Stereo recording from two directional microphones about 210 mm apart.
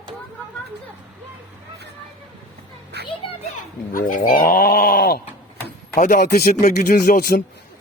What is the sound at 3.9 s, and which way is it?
Goat, 40° left (ahead or behind).